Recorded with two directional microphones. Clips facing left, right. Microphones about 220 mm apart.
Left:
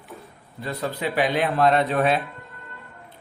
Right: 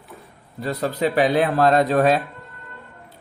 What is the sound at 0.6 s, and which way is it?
A man's voice, 45° right (ahead or behind).